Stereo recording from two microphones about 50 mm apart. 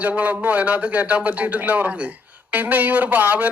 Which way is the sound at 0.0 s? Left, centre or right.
Right.